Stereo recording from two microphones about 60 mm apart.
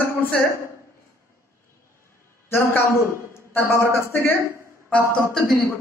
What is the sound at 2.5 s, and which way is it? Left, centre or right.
Speech, left.